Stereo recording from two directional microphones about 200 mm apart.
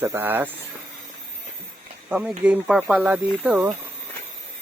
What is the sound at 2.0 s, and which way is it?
Speech, 10° right (ahead or behind).